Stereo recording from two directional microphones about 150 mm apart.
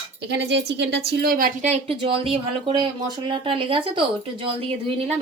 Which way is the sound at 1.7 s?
40° right (ahead or behind).